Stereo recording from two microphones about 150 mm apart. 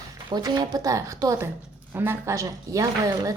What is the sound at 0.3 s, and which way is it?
Speech, 30° right (ahead or behind).